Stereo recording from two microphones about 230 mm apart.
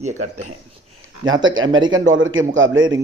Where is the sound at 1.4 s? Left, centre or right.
Right.